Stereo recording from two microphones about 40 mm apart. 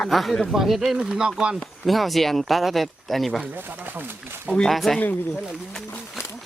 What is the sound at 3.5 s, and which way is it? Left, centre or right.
Speech, right.